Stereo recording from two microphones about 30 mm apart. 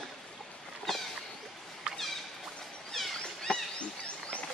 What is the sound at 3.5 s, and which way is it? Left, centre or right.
Wild animals, left.